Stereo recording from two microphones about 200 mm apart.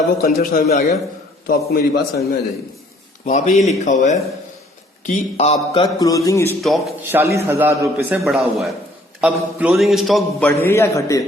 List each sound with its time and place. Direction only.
0.2 s a man's voice: 50° left (ahead or behind)
3.2 s a man's voice: 35° left (ahead or behind); by 6.6 s 15° left (ahead or behind)
6.6 s a man's voice: centre (ahead or behind)
7.1 s a man's voice: 15° right (ahead or behind)
10.7 s a man's voice: 15° left (ahead or behind)